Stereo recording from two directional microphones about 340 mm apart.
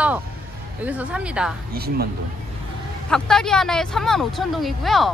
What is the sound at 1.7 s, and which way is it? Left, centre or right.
Speech, right.